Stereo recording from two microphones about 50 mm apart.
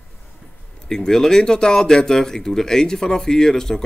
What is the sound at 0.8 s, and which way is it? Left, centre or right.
Speech, centre.